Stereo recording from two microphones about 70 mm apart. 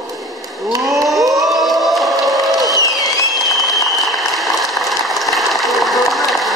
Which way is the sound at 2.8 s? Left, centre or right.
Left.